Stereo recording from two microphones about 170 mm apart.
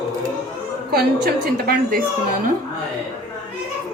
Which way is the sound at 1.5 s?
60° right (ahead or behind).